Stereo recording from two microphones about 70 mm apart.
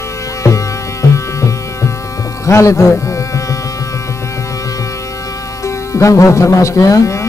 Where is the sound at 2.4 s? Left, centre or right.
Left.